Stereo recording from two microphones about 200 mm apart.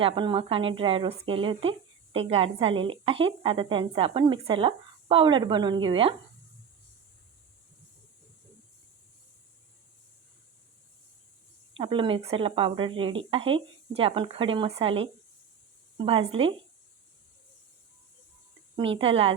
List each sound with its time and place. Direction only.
0.0 s speech: 25° right (ahead or behind)
11.8 s speech: 25° right (ahead or behind)
18.8 s speech: 25° right (ahead or behind)